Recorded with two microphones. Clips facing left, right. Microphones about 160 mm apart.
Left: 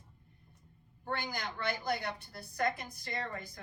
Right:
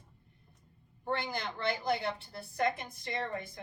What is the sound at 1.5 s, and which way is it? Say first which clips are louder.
A woman's voice: right 3 dB; 25° right (ahead or behind).